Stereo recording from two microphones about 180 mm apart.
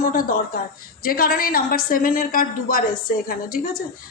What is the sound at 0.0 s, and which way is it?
A woman's voice, 55° left (ahead or behind).